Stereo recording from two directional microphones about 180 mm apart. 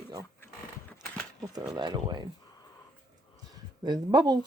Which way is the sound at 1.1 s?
5° left (ahead or behind).